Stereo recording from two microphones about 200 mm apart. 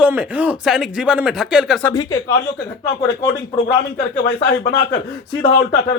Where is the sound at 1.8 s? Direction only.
20° left (ahead or behind).